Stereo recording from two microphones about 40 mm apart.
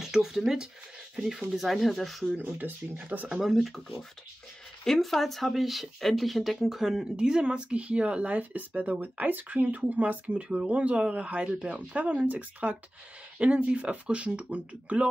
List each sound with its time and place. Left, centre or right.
0.0 s speech: centre
2.3 s speech: right
3.3 s speech: centre
7.2 s speech: right
13.4 s speech: right